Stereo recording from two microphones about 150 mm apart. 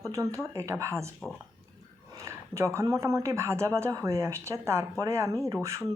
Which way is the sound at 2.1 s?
20° right (ahead or behind).